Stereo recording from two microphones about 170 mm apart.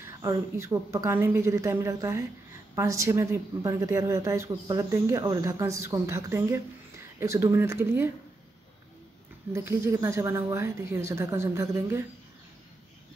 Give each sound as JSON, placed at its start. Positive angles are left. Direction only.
{"t": 0.0, "sound": "a woman's voice", "side_deg": -15}
{"t": 9.5, "sound": "a woman's voice", "side_deg": -15}